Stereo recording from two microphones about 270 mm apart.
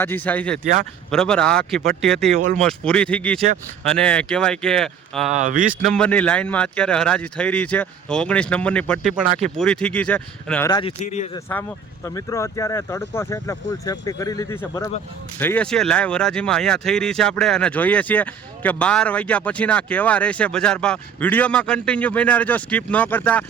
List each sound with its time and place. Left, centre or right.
0.0 s speech: centre
5.3 s speech: right
5.8 s speech: centre
11.0 s speech: left
12.0 s speech: centre